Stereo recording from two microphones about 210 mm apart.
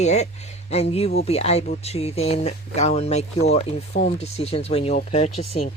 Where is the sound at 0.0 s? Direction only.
30° left (ahead or behind).